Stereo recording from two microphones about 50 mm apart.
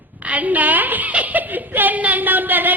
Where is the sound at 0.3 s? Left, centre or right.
Right.